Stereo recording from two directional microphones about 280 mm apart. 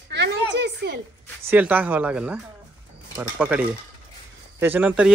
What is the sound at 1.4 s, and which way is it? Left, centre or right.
Speech, centre.